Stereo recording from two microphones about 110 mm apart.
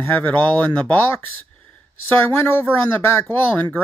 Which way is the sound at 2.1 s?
20° left (ahead or behind).